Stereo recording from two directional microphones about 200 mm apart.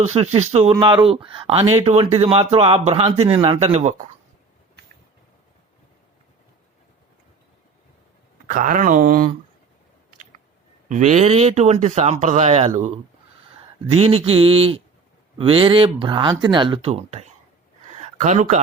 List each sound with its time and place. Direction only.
0.0 s speech: 35° right (ahead or behind)
8.4 s speech: 40° right (ahead or behind)
10.8 s speech: 35° right (ahead or behind)